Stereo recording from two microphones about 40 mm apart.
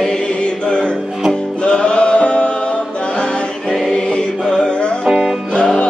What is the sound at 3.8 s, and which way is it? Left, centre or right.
Music, left.